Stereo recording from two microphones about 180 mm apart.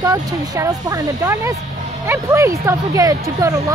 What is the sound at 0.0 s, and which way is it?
Speech, 20° right (ahead or behind).